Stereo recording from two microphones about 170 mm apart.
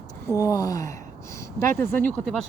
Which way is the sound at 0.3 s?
20° left (ahead or behind).